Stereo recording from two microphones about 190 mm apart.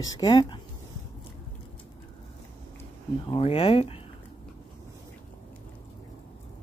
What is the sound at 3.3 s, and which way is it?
Speech, 30° left (ahead or behind).